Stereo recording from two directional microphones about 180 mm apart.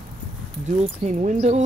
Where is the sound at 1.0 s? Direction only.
40° right (ahead or behind).